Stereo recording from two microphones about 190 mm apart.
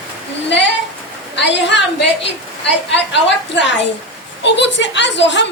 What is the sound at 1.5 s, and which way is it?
Speech, 70° left (ahead or behind).